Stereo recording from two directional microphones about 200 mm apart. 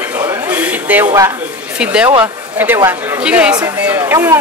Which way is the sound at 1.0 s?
15° right (ahead or behind).